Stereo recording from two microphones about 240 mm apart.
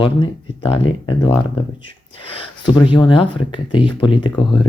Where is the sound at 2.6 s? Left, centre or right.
Centre.